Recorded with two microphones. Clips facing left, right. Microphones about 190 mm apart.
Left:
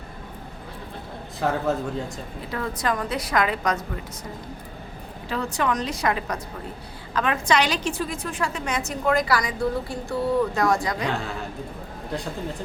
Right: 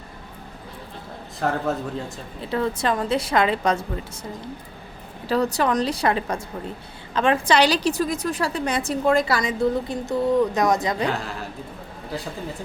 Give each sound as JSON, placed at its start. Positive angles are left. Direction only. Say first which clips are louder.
{"t": 1.4, "sound": "a man's voice", "louder": "even", "side_deg": 0}
{"t": 2.5, "sound": "a woman's voice", "louder": "right 4 dB", "side_deg": -25}
{"t": 5.3, "sound": "a woman's voice", "louder": "right 5 dB", "side_deg": -35}
{"t": 11.1, "sound": "a man's voice", "louder": "even", "side_deg": 0}